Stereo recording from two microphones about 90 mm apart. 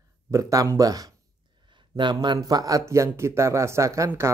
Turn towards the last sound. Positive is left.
turn(degrees=-30)  # may be behind; listen again after turning